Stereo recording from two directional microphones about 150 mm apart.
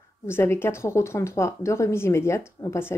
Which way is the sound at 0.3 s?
15° left (ahead or behind).